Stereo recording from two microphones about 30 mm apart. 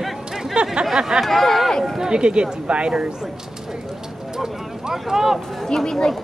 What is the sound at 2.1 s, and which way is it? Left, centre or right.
Speech, right.